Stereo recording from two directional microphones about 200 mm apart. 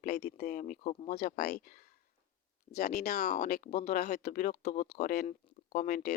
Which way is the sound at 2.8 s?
45° left (ahead or behind).